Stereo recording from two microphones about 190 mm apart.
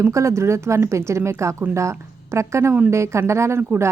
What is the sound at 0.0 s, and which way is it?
Speech, 15° right (ahead or behind).